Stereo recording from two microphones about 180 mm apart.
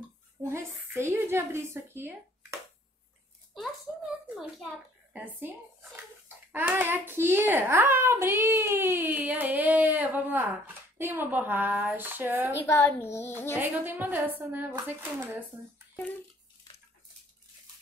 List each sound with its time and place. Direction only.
0.4 s a child's voice: 15° right (ahead or behind)
3.5 s a child's voice: centre (ahead or behind)
5.4 s a child's voice: 10° right (ahead or behind)
12.6 s a child's voice: 15° left (ahead or behind)
13.6 s a child's voice: 10° right (ahead or behind)